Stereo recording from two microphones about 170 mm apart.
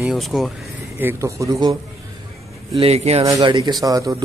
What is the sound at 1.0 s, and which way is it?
Speech, 15° right (ahead or behind).